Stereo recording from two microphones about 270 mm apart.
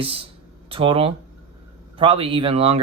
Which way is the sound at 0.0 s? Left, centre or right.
Right.